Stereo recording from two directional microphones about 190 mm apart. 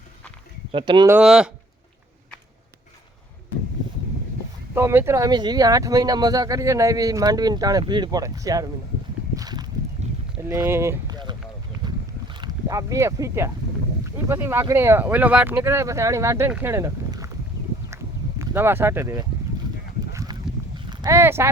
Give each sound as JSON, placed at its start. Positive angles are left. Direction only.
{"t": 0.7, "sound": "speech", "side_deg": -25}
{"t": 1.0, "sound": "speech", "side_deg": -5}
{"t": 4.7, "sound": "speech", "side_deg": -10}
{"t": 9.3, "sound": "a sound", "side_deg": -20}
{"t": 10.0, "sound": "a sound", "side_deg": -35}
{"t": 10.5, "sound": "speech", "side_deg": -15}
{"t": 11.9, "sound": "boat", "side_deg": -25}
{"t": 14.0, "sound": "speech", "side_deg": -15}
{"t": 17.9, "sound": "a sound", "side_deg": -15}
{"t": 20.7, "sound": "horse", "side_deg": -25}